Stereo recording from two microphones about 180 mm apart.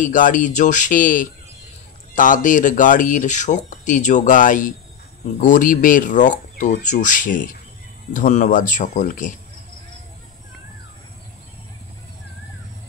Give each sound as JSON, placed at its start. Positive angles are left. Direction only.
{"t": 0.0, "sound": "speech", "side_deg": 45}